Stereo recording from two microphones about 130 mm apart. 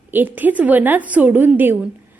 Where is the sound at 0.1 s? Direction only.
15° right (ahead or behind).